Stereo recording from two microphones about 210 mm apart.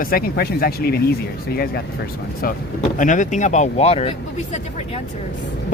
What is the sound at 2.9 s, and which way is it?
Speech, 35° left (ahead or behind).